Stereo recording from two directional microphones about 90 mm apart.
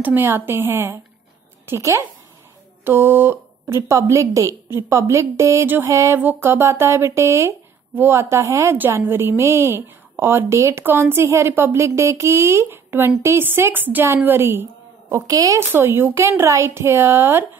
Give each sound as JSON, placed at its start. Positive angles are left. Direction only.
{"t": 0.0, "sound": "speech", "side_deg": -25}
{"t": 3.9, "sound": "speech", "side_deg": -35}
{"t": 6.1, "sound": "speech", "side_deg": -25}
{"t": 8.7, "sound": "speech", "side_deg": -20}
{"t": 15.7, "sound": "speech", "side_deg": -25}